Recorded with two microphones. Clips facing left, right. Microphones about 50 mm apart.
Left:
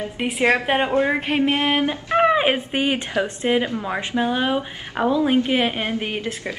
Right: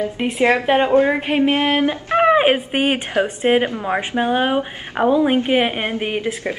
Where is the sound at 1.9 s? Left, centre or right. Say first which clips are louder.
Right 3 dB; right.